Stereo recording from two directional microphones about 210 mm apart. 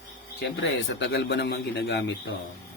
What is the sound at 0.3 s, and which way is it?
A man's voice, 60° left (ahead or behind).